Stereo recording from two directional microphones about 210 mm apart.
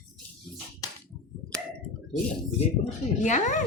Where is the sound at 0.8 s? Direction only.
15° left (ahead or behind).